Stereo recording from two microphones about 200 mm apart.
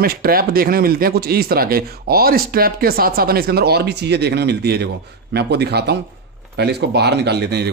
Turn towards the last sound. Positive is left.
turn(degrees=-55)  # may be behind; listen again after turning